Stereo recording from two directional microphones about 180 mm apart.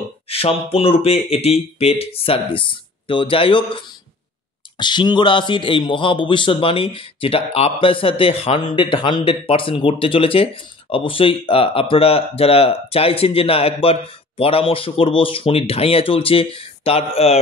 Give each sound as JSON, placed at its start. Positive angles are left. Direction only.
{"t": 0.3, "sound": "speech", "side_deg": 35}